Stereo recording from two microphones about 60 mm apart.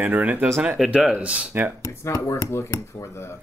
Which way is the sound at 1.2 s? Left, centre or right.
Centre.